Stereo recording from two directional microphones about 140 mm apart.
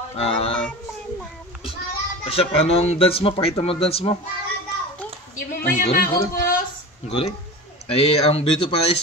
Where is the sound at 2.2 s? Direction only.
45° left (ahead or behind).